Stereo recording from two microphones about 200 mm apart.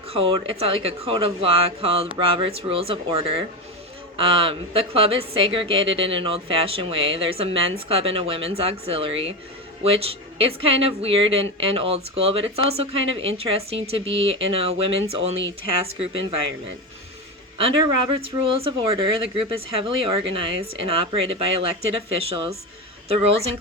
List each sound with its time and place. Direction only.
0.1 s a woman's voice: 25° right (ahead or behind)
17.6 s a woman's voice: 30° right (ahead or behind)